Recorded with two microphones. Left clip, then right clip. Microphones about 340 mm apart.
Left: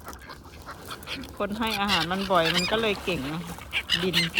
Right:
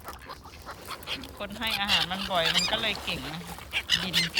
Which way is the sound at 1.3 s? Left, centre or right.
Centre.